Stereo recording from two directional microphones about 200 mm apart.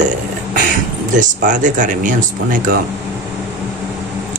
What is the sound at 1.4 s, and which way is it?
Speech, 40° right (ahead or behind).